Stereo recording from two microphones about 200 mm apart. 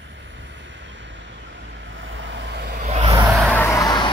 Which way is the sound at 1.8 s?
65° right (ahead or behind).